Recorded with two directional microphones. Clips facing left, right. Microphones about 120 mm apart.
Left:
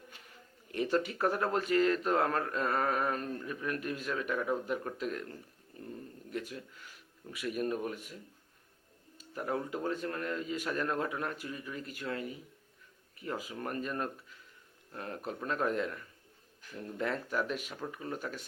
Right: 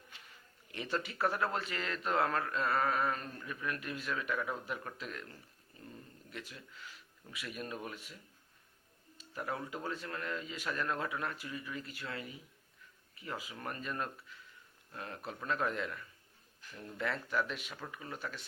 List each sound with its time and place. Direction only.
0.1 s a sound: 45° left (ahead or behind)
0.7 s speech: 45° left (ahead or behind)
6.3 s speech: 45° left (ahead or behind)
9.1 s speech: 45° left (ahead or behind)
17.0 s speech: 40° left (ahead or behind)